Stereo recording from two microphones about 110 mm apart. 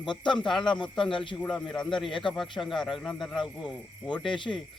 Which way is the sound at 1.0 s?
50° left (ahead or behind).